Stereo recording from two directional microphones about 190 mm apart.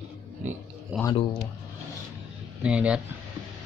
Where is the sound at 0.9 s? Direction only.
5° right (ahead or behind).